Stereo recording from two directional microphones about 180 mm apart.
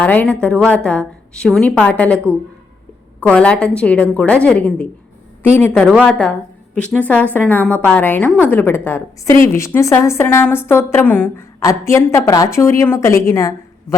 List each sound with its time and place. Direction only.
0.0 s a woman's voice: 10° left (ahead or behind)